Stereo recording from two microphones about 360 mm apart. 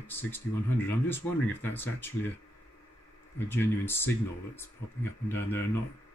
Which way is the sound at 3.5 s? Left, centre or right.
Centre.